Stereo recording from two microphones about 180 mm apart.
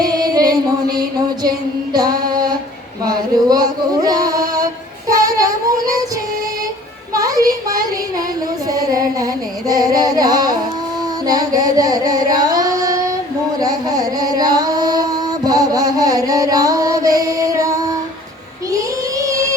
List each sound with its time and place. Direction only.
0.0 s music: 20° right (ahead or behind)
1.5 s female singing: 20° right (ahead or behind)
3.1 s a sound: 20° right (ahead or behind)
7.1 s a sound: 20° right (ahead or behind)
11.3 s carnatic music: 20° right (ahead or behind)
12.5 s child singing: 20° right (ahead or behind)
13.6 s singing: 20° right (ahead or behind)
15.4 s music: 20° right (ahead or behind)
19.2 s music: 20° right (ahead or behind)